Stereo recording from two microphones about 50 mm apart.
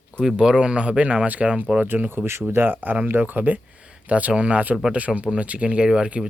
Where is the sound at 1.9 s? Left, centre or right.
Right.